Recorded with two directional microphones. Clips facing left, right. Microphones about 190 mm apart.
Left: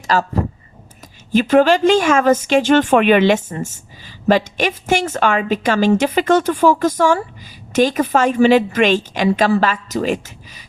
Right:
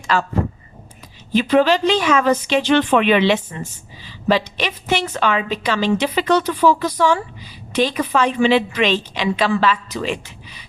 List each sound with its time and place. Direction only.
0.1 s speech: 40° left (ahead or behind)
1.3 s speech: 45° left (ahead or behind)